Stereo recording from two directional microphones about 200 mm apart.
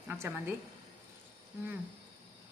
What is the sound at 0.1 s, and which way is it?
Speech, 10° right (ahead or behind).